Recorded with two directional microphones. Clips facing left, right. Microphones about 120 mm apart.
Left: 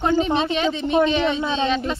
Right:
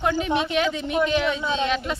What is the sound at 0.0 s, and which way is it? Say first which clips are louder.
Speech: left 3 dB; 25° left (ahead or behind).